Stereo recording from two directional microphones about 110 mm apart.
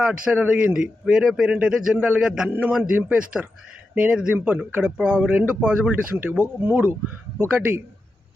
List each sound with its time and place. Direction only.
0.0 s speech: 10° right (ahead or behind)